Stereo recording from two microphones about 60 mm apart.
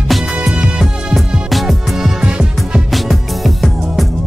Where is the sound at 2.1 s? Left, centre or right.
Centre.